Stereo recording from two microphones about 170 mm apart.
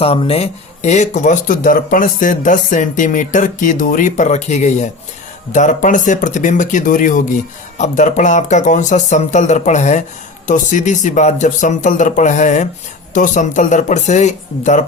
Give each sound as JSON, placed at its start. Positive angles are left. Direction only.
{"t": 0.0, "sound": "speech", "side_deg": 35}